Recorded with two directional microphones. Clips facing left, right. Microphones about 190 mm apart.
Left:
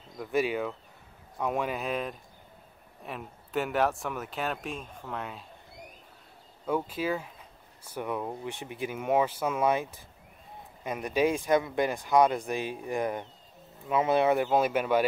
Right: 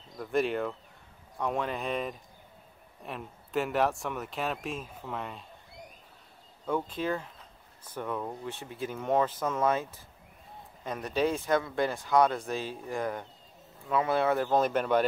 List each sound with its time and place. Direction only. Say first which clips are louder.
0.2 s speech: even; 5° left (ahead or behind)
6.6 s speech: left 1 dB; 5° left (ahead or behind)